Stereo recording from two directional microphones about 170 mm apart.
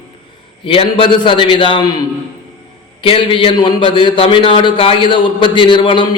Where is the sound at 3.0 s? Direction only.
30° left (ahead or behind).